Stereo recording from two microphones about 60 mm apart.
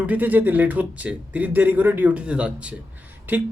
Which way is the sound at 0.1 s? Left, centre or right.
Right.